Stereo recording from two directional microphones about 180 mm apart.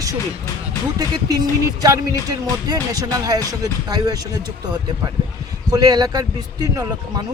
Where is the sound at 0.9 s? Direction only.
20° right (ahead or behind).